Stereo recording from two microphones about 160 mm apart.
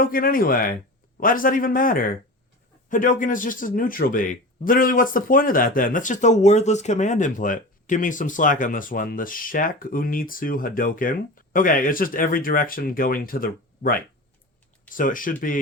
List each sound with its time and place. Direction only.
0.0 s speech: 60° left (ahead or behind)